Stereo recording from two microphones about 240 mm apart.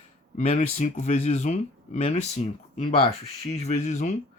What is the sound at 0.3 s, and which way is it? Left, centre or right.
Speech, left.